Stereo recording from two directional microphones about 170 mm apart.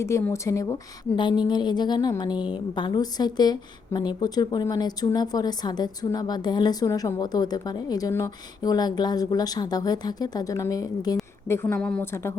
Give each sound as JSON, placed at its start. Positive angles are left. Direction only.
{"t": 0.0, "sound": "a woman's voice", "side_deg": 15}